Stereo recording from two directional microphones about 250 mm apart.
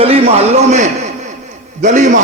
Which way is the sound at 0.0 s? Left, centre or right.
Right.